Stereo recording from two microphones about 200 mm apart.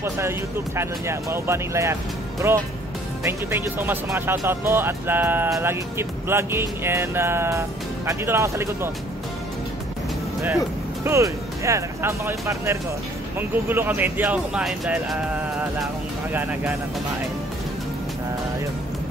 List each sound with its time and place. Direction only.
0.7 s speech: 15° right (ahead or behind)
11.1 s speech: 15° right (ahead or behind)